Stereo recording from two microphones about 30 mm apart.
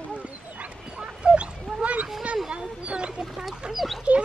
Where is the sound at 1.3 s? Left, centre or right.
Right.